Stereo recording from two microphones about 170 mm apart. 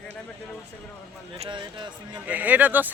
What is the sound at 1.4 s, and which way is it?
Speech, 30° right (ahead or behind).